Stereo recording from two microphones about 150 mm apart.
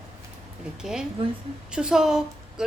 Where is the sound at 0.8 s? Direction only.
5° right (ahead or behind).